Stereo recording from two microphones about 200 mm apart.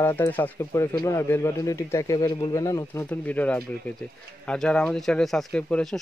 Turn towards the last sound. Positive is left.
turn(degrees=5)  # may be behind; listen again after turning